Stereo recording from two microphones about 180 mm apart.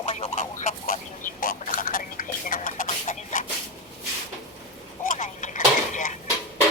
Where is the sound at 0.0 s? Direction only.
35° left (ahead or behind).